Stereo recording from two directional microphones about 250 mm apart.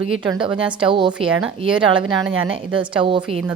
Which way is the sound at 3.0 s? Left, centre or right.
Centre.